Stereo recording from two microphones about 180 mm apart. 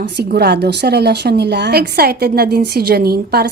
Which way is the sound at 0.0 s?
65° right (ahead or behind).